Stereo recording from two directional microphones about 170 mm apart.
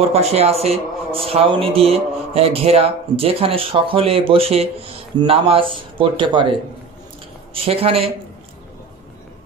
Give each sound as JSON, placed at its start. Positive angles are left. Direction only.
{"t": 0.1, "sound": "a man's voice", "side_deg": -40}
{"t": 7.5, "sound": "a man's voice", "side_deg": -35}